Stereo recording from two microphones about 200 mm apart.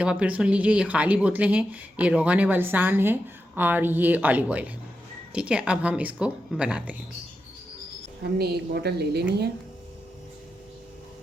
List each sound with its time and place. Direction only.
0.0 s speech: 5° right (ahead or behind)
8.4 s a woman's voice: 50° right (ahead or behind)